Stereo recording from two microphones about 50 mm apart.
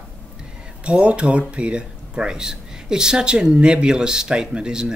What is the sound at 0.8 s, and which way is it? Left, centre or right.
Speech, right.